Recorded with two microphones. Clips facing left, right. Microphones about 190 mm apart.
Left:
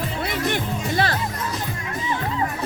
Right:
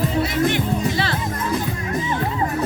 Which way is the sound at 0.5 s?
45° left (ahead or behind).